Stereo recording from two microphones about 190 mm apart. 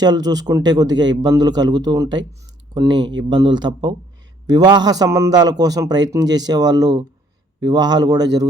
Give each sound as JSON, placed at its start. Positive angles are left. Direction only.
{"t": 0.0, "sound": "a man's voice", "side_deg": -20}